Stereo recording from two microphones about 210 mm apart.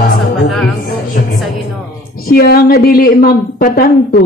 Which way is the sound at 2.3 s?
45° left (ahead or behind).